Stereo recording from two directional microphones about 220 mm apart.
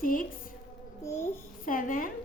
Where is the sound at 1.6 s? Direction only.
40° left (ahead or behind).